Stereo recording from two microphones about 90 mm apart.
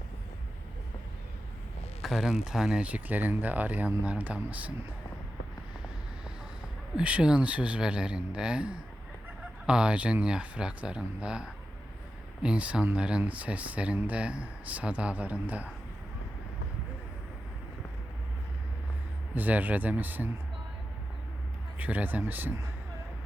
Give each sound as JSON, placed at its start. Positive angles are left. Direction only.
{"t": 2.0, "sound": "speech", "side_deg": -5}
{"t": 2.8, "sound": "speech", "side_deg": -15}
{"t": 6.9, "sound": "speech", "side_deg": -15}
{"t": 19.3, "sound": "speech", "side_deg": -20}
{"t": 21.8, "sound": "speech", "side_deg": -20}